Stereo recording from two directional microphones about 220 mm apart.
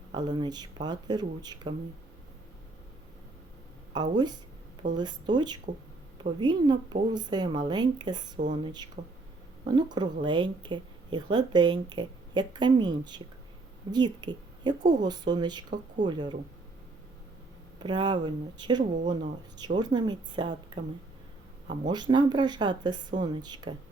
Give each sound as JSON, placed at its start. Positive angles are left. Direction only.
{"t": 0.1, "sound": "speech", "side_deg": -20}
{"t": 3.9, "sound": "speech", "side_deg": -20}
{"t": 8.4, "sound": "speech", "side_deg": -35}
{"t": 9.6, "sound": "speech", "side_deg": -20}
{"t": 17.7, "sound": "speech", "side_deg": -20}